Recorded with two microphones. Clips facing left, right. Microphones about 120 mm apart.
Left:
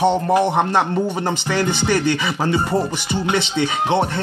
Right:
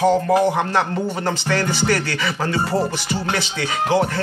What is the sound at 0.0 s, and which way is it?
Speech, 25° left (ahead or behind).